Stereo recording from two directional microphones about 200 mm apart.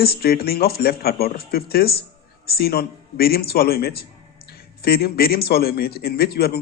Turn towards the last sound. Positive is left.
turn(degrees=50)  # may be behind; listen again after turning